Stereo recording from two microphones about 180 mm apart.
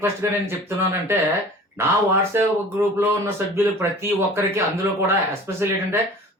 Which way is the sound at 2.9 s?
15° right (ahead or behind).